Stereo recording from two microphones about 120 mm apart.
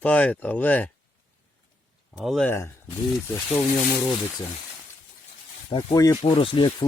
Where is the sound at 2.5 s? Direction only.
20° left (ahead or behind).